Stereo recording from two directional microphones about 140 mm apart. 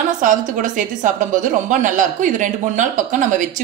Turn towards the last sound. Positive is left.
turn(degrees=-65)  # may be behind; listen again after turning